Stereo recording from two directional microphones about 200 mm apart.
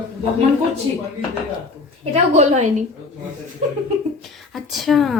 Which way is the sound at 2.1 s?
35° right (ahead or behind).